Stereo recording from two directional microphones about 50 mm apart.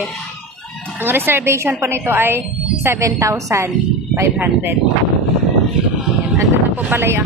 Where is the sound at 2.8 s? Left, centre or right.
Right.